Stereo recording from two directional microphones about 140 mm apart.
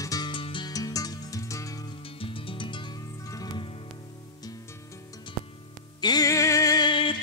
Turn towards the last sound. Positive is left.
turn(degrees=35)  # may be behind; listen again after turning